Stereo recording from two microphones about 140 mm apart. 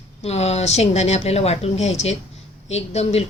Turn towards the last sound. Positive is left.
turn(degrees=50)  # may be behind; listen again after turning